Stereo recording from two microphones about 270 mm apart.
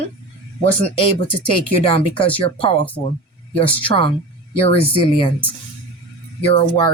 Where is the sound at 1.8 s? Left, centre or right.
Left.